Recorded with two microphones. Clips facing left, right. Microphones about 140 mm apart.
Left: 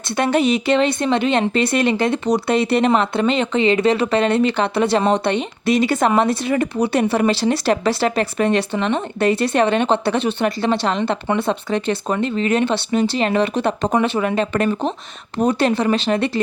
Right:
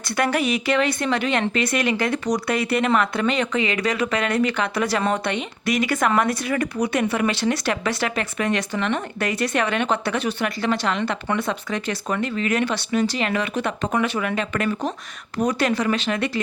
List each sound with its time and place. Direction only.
0.2 s speech: 25° left (ahead or behind)